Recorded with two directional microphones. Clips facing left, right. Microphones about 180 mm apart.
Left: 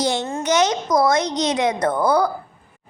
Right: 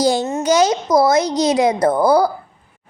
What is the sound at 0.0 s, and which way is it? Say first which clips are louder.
A child's voice: right 5 dB; 35° right (ahead or behind).